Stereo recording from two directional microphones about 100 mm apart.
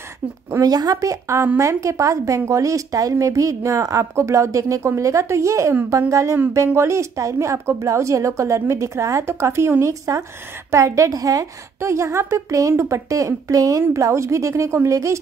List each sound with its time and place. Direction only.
0.6 s a woman's voice: 40° right (ahead or behind)